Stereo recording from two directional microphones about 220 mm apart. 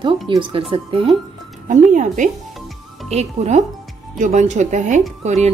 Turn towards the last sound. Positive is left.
turn(degrees=-30)  # may be behind; listen again after turning